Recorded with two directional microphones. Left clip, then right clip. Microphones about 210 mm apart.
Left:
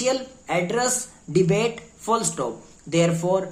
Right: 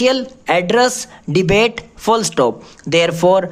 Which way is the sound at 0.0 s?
45° right (ahead or behind).